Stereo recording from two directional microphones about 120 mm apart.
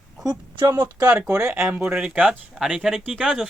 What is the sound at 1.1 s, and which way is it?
Speech, 10° right (ahead or behind).